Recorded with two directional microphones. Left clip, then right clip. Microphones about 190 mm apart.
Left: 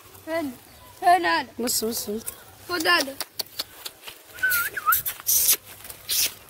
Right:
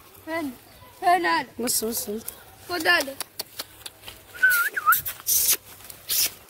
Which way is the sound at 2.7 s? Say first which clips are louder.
Even; 50° left (ahead or behind).